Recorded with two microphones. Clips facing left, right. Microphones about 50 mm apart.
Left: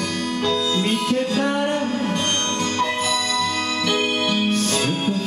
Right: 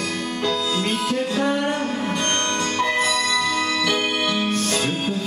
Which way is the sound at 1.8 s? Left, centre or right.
Right.